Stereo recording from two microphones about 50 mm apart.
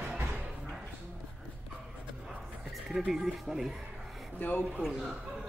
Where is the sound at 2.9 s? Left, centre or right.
Centre.